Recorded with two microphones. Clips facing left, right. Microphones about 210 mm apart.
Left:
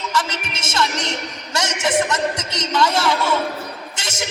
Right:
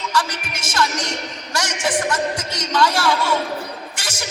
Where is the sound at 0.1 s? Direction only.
20° left (ahead or behind).